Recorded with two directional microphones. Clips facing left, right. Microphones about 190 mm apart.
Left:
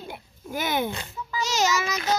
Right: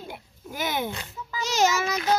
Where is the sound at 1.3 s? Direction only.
55° right (ahead or behind).